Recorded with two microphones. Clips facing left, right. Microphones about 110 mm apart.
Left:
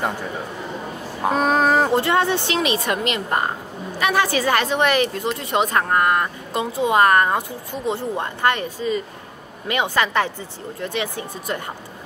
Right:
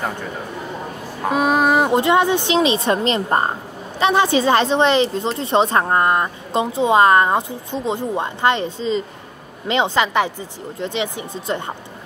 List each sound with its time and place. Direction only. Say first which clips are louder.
1.3 s speech: right 2 dB; 5° right (ahead or behind); by 11.7 s 25° right (ahead or behind)